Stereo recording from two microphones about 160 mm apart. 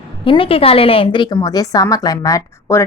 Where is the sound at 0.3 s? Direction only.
35° left (ahead or behind).